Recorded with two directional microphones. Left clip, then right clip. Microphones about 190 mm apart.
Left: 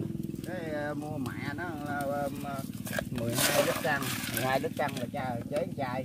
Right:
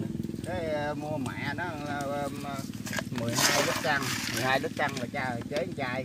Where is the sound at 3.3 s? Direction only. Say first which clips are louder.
Right 1 dB; 50° left (ahead or behind).